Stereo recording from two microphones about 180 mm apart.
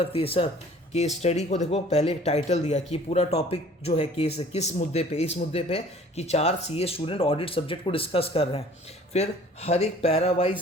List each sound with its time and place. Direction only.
0.0 s speech: 30° left (ahead or behind)